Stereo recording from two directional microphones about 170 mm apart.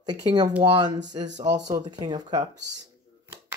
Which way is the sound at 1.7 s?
25° right (ahead or behind).